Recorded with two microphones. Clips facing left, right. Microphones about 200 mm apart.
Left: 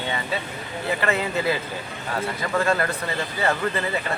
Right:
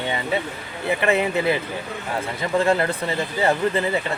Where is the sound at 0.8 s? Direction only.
20° right (ahead or behind).